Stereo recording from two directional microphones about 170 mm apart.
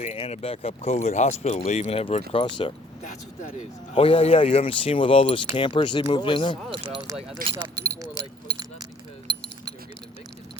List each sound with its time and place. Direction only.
0.0 s speech: 40° left (ahead or behind)
3.9 s speech: 35° left (ahead or behind)
7.5 s keys jangling: 20° right (ahead or behind)